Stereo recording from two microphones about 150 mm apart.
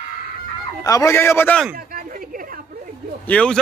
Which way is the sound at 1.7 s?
70° right (ahead or behind).